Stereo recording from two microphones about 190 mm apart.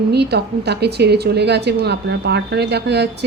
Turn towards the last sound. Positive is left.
turn(degrees=-60)  # may be behind; listen again after turning